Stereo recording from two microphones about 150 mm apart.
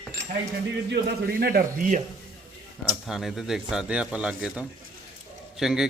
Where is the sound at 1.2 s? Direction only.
85° right.